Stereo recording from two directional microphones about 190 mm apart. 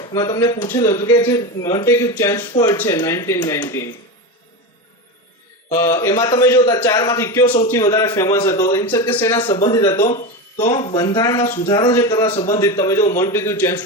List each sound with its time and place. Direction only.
0.0 s speech: 20° left (ahead or behind)
5.8 s speech: 15° left (ahead or behind)
9.4 s speech: 25° left (ahead or behind)